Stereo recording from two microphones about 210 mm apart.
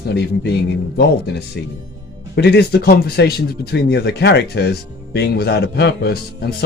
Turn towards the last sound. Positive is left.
turn(degrees=50)  # may be behind; listen again after turning